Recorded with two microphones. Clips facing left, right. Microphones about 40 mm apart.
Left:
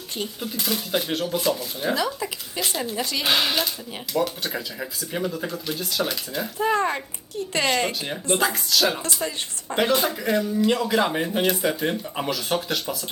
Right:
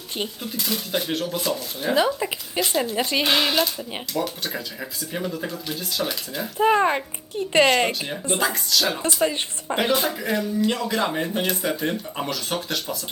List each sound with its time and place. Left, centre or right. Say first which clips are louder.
0.6 s speech: left 1 dB; centre
2.0 s speech: right 5 dB; right
3.2 s speech: left 1 dB; centre
6.6 s speech: right 4 dB; right
8.4 s speech: left 1 dB; centre